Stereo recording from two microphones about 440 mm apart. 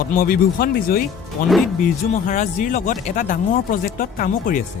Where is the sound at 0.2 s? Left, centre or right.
Centre.